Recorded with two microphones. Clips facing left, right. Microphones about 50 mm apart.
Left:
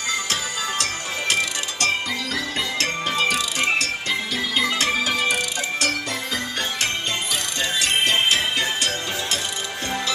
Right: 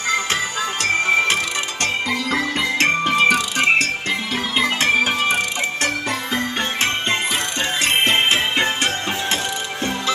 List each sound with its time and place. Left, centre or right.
1.0 s music: right